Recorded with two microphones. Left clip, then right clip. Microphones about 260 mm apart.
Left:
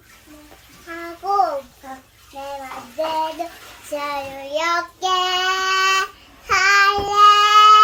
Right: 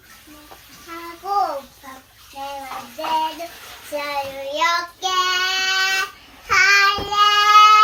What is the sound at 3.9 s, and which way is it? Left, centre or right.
Child singing, left.